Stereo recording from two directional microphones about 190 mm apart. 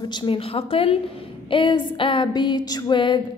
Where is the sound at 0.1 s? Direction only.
25° left (ahead or behind).